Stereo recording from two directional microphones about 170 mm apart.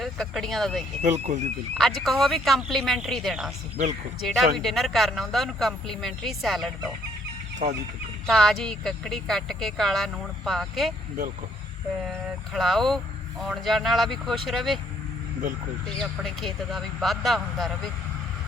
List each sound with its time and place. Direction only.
0.0 s speech: centre (ahead or behind)
1.0 s speech: 45° right (ahead or behind)
1.8 s speech: centre (ahead or behind)
7.6 s chicken: 40° right (ahead or behind)
8.3 s speech: centre (ahead or behind)
12.5 s speech: centre (ahead or behind)
16.0 s speech: centre (ahead or behind)